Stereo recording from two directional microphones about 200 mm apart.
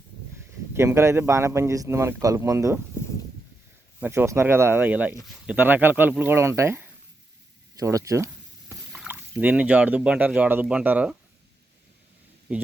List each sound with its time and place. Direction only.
0.7 s speech: 15° right (ahead or behind)
4.0 s speech: 10° right (ahead or behind)
12.5 s speech: 5° right (ahead or behind)